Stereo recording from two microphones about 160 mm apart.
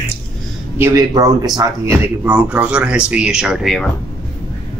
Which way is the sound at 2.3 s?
10° right (ahead or behind).